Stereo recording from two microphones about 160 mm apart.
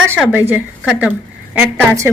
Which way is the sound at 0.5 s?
10° right (ahead or behind).